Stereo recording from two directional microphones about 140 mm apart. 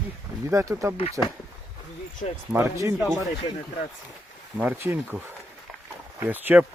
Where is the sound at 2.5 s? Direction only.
20° right (ahead or behind).